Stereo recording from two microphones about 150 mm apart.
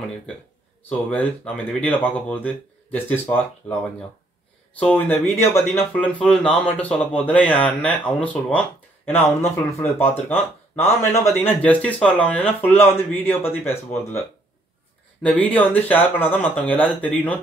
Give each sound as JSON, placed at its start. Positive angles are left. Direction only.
{"t": 0.8, "sound": "speech", "side_deg": 10}
{"t": 4.7, "sound": "speech", "side_deg": 10}
{"t": 15.2, "sound": "speech", "side_deg": 10}